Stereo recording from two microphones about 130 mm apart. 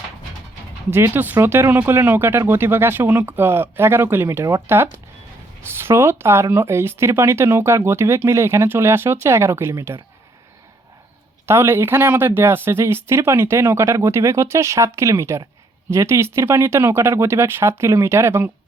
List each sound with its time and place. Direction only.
0.9 s speech: 15° right (ahead or behind)
11.4 s speech: 20° right (ahead or behind)